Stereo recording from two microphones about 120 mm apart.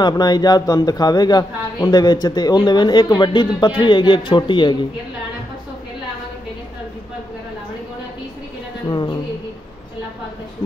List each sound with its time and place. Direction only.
0.0 s speech: 35° left (ahead or behind)
8.8 s speech: 35° left (ahead or behind)